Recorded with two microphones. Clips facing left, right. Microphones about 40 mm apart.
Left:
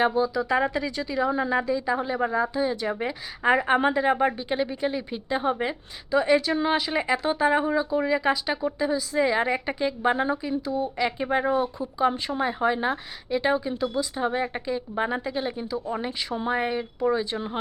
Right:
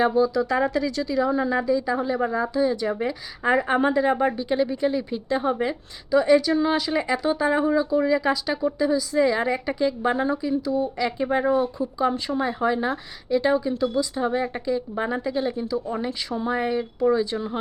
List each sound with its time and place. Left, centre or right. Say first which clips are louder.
0.0 s a woman's voice: right 3 dB; centre
11.5 s speech: right 3 dB; centre
11.9 s a woman's voice: even; centre